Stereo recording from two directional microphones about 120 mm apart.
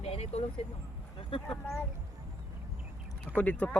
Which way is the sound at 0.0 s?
60° left (ahead or behind).